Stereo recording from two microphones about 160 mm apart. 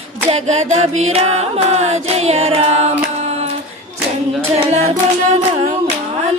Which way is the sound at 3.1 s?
40° right (ahead or behind).